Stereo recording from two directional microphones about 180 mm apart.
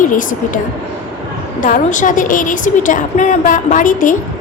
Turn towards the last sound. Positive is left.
turn(degrees=45)  # may be behind; listen again after turning